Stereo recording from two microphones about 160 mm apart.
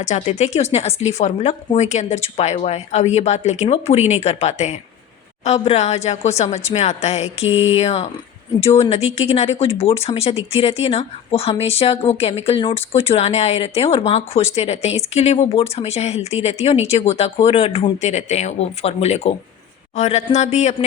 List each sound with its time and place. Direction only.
0.0 s speech: 45° left (ahead or behind)